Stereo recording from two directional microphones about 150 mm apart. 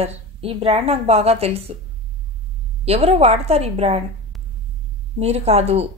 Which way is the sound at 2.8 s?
45° right (ahead or behind).